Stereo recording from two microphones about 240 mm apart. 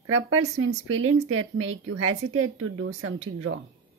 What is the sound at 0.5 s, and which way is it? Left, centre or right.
Speech, right.